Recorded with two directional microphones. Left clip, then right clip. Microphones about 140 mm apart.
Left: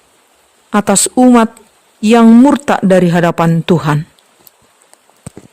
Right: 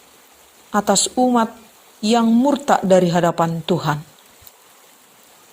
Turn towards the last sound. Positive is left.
turn(degrees=50)  # may be behind; listen again after turning